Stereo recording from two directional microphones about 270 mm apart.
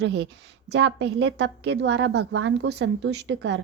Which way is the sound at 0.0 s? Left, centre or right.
Right.